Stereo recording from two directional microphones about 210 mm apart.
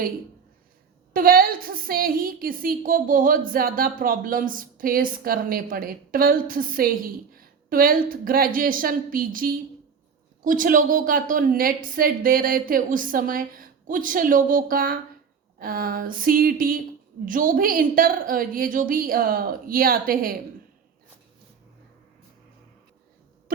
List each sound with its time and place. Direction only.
1.1 s a woman's voice: 45° right (ahead or behind)